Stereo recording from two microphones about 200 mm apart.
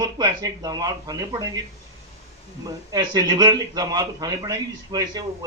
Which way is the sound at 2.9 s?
20° right (ahead or behind).